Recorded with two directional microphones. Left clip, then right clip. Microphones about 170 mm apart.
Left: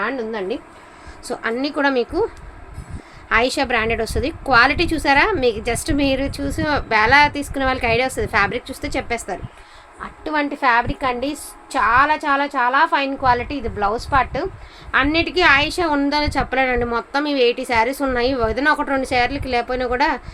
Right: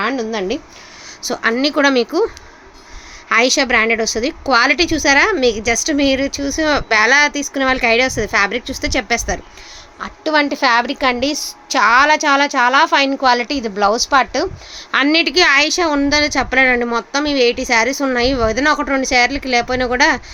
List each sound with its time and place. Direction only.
0.0 s speech: 90° right
1.3 s a woman's voice: 50° right (ahead or behind)
3.2 s a woman's voice: 40° right (ahead or behind)
10.0 s a woman's voice: 75° right (ahead or behind)
14.9 s a woman's voice: 70° right (ahead or behind); by 20.2 s 45° right (ahead or behind)